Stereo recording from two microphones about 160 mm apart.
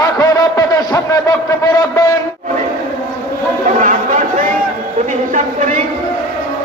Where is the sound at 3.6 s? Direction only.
55° right (ahead or behind).